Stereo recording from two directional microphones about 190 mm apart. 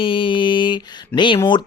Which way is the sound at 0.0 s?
25° left (ahead or behind).